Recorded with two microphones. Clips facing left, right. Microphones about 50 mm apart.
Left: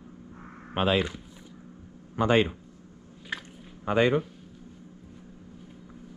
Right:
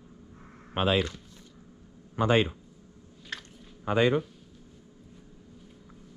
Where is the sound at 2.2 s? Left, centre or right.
Left.